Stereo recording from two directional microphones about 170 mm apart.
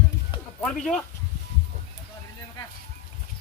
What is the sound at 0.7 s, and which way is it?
Speech, 5° left (ahead or behind).